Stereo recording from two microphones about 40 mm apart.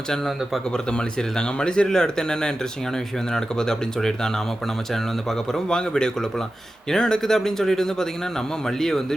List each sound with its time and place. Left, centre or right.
0.9 s speech: left
5.5 s speech: centre